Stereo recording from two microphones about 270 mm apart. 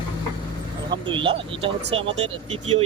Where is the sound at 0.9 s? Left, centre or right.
Centre.